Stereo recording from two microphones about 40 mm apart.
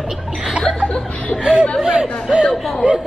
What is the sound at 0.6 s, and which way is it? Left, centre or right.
Speech, centre.